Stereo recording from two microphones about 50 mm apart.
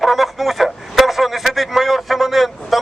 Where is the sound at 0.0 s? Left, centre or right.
Centre.